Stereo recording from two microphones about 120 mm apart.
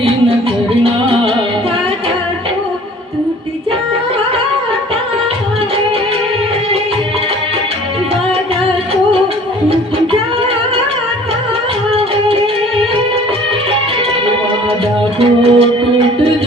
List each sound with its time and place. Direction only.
0.9 s music: 50° right (ahead or behind)
15.2 s music: 50° right (ahead or behind)